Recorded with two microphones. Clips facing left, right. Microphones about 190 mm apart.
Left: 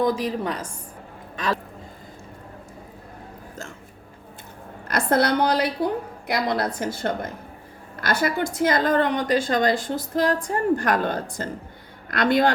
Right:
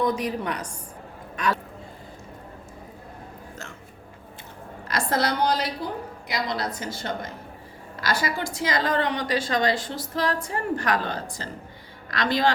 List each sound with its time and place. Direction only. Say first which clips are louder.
0.0 s a woman's voice: left 2 dB; 30° left (ahead or behind)
4.9 s a woman's voice: left 4 dB; 55° left (ahead or behind)